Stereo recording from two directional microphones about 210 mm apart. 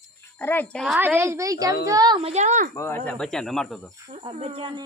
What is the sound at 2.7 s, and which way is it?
Speech, 10° left (ahead or behind).